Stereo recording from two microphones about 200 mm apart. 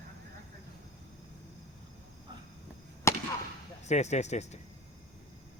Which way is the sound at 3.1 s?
15° left (ahead or behind).